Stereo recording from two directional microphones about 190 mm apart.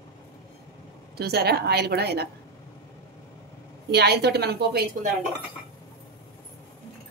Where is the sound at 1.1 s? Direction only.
55° right (ahead or behind).